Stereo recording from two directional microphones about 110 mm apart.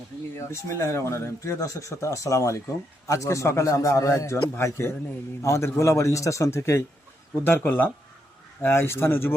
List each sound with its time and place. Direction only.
0.3 s speech: 25° left (ahead or behind)